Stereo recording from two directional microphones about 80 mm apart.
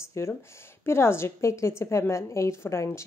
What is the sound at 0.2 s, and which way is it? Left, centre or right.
A woman's voice, left.